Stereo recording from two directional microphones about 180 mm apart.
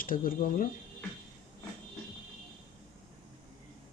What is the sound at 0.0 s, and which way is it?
Speech, 50° left (ahead or behind).